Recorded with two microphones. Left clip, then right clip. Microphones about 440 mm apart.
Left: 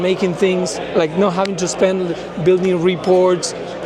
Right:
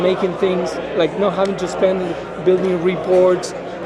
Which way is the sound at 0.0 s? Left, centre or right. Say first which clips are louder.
Even; left.